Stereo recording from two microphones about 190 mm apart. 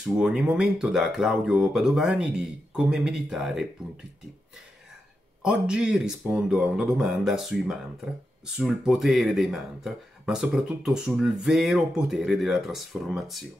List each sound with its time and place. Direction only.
0.2 s speech: 5° right (ahead or behind)
5.4 s speech: 5° right (ahead or behind)